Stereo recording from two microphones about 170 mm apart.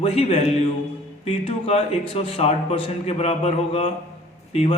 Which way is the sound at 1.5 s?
35° left (ahead or behind).